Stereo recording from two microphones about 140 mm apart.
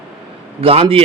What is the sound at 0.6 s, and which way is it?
Speech, 45° right (ahead or behind).